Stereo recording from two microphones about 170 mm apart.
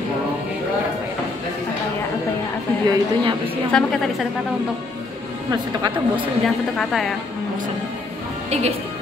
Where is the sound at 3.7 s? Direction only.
Centre (ahead or behind).